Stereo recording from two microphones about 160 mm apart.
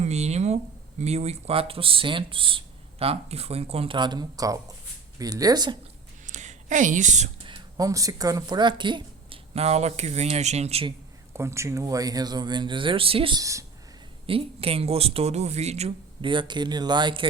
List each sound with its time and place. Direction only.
0.0 s speech: 45° right (ahead or behind); by 5.7 s 25° right (ahead or behind)
6.2 s a sound: 50° right (ahead or behind)
7.4 s speech: 25° right (ahead or behind)
11.3 s speech: 15° right (ahead or behind); by 13.4 s 35° right (ahead or behind)
13.4 s speech: 20° right (ahead or behind)
14.3 s speech: 35° right (ahead or behind)